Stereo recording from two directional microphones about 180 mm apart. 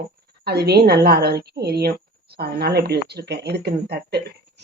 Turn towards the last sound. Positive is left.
turn(degrees=-65)  # may be behind; listen again after turning